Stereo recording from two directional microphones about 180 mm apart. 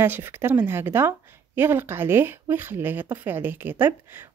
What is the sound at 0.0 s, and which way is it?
Speech, 10° right (ahead or behind).